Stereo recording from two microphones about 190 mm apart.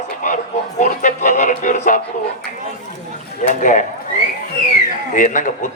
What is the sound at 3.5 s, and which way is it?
Speech, 45° left (ahead or behind).